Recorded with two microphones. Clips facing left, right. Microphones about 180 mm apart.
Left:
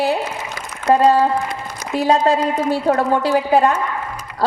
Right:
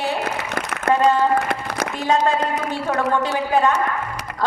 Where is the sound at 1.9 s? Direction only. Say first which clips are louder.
Left 6 dB; 35° left (ahead or behind).